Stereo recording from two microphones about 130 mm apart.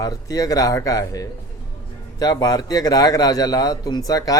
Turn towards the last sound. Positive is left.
turn(degrees=30)  # may be behind; listen again after turning